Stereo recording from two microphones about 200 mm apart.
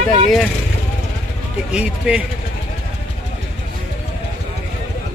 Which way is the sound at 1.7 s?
5° right (ahead or behind).